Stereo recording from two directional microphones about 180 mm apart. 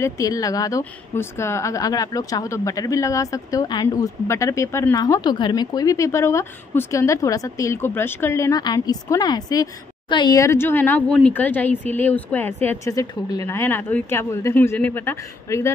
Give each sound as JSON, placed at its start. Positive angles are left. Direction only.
{"t": 0.0, "sound": "speech", "side_deg": 20}